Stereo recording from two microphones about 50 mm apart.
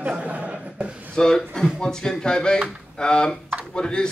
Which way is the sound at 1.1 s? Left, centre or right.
Centre.